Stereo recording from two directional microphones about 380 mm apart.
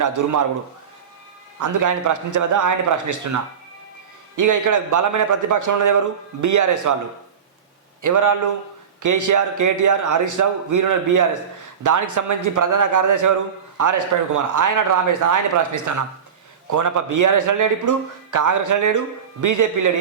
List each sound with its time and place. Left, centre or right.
0.0 s a man's voice: right
1.5 s a man's voice: right
4.4 s a man's voice: right
8.0 s a man's voice: right